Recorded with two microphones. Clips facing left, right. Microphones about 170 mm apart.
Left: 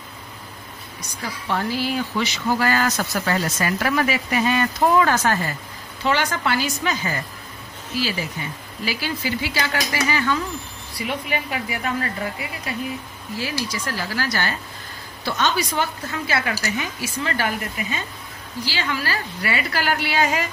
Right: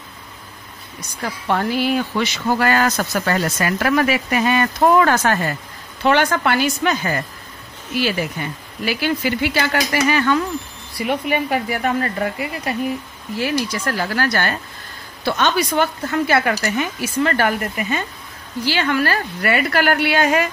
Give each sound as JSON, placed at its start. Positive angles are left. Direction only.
{"t": 1.5, "sound": "speech", "side_deg": -60}